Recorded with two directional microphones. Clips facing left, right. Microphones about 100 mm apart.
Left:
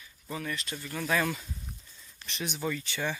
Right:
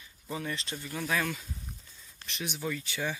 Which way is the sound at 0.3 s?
25° right (ahead or behind).